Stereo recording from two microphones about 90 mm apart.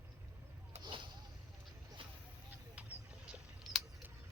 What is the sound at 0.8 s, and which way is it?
Vehicle, 60° right (ahead or behind).